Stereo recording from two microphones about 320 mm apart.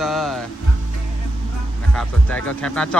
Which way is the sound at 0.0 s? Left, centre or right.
Centre.